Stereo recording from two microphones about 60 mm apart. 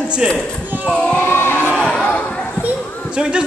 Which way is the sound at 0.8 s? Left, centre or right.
Centre.